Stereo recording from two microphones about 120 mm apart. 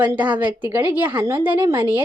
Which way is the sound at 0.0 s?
15° right (ahead or behind).